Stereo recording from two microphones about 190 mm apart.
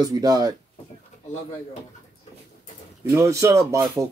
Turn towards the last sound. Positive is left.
turn(degrees=-15)  # may be behind; listen again after turning